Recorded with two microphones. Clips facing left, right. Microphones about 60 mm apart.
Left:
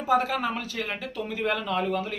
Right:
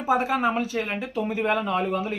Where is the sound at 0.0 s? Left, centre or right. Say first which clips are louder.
Right 2 dB; right.